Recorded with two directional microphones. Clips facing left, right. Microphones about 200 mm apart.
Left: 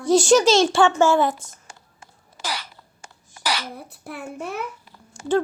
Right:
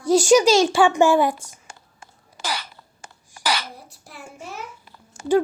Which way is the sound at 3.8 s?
60° left (ahead or behind).